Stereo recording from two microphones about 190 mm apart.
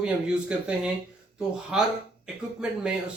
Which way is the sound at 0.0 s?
5° right (ahead or behind).